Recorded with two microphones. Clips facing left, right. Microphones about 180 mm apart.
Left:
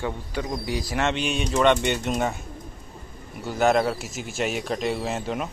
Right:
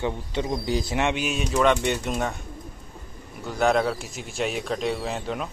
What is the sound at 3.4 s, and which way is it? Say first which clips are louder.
Speech: left 1 dB; centre (ahead or behind).